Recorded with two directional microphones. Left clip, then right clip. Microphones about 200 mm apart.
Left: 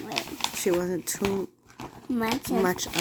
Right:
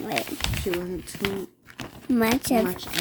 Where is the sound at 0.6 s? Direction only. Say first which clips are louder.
Left 3 dB; 5° left (ahead or behind).